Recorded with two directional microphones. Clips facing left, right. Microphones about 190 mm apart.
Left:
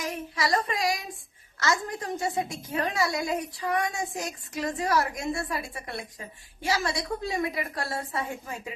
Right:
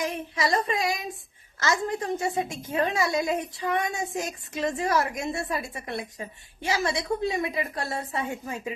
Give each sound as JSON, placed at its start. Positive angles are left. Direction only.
{"t": 0.0, "sound": "a woman's voice", "side_deg": -25}